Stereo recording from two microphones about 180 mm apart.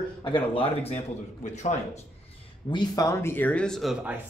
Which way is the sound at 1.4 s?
40° left (ahead or behind).